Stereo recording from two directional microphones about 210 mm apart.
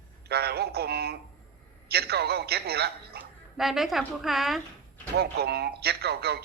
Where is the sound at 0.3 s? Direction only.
50° right (ahead or behind).